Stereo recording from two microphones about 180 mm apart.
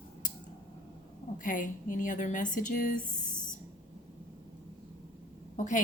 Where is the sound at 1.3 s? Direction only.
45° left (ahead or behind).